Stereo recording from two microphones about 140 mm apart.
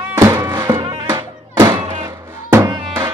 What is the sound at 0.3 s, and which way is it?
Music, 25° right (ahead or behind).